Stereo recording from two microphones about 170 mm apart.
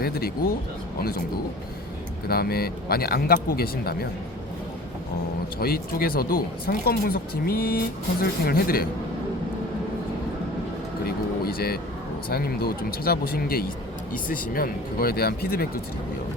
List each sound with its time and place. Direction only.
2.2 s speech: 65° left (ahead or behind)
5.5 s speech: 65° left (ahead or behind)
11.0 s a sound: 65° left (ahead or behind)
12.3 s speech: 65° left (ahead or behind)